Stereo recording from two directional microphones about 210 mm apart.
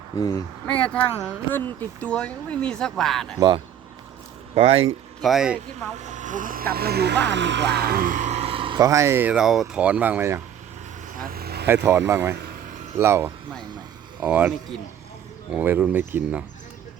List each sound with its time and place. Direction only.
0.2 s speech: 15° left (ahead or behind)
0.7 s speech: 5° left (ahead or behind)
4.5 s speech: 30° right (ahead or behind)
5.2 s speech: centre (ahead or behind)
6.0 s speech: 35° right (ahead or behind); by 10.4 s 10° right (ahead or behind)
11.2 s vehicle: 45° right (ahead or behind)
11.6 s speech: 10° right (ahead or behind)
15.5 s speech: 5° right (ahead or behind)